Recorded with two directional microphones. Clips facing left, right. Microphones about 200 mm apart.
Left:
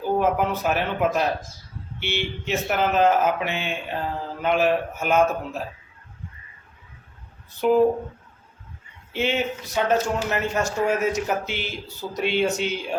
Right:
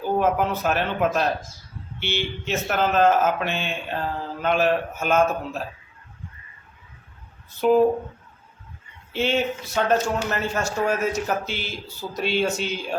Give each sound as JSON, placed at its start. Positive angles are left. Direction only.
{"t": 0.2, "sound": "speech", "side_deg": 10}
{"t": 7.6, "sound": "speech", "side_deg": 10}
{"t": 9.1, "sound": "speech", "side_deg": 15}